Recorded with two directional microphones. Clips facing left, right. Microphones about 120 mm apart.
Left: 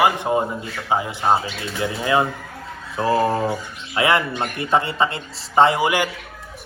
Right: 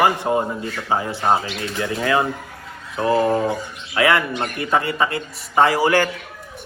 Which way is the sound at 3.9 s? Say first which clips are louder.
Right 1 dB; 25° left (ahead or behind).